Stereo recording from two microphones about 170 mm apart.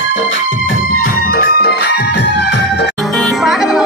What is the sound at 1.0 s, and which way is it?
Music, 65° left (ahead or behind).